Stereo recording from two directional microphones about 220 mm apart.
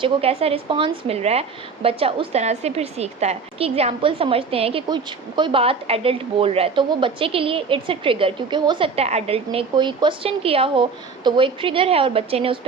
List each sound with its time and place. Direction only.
0.0 s a woman's voice: 25° right (ahead or behind)